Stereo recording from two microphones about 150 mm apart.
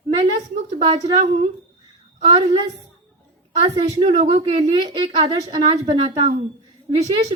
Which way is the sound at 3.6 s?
35° right (ahead or behind).